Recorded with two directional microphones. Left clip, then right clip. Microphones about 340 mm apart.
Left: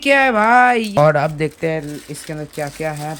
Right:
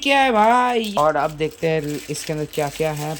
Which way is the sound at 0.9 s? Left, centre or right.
Left.